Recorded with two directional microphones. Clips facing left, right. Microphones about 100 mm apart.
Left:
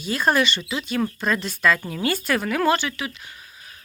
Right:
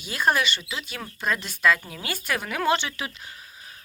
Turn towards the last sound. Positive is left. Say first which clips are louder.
# left 3 dB
turn(degrees=-25)  # may be behind; listen again after turning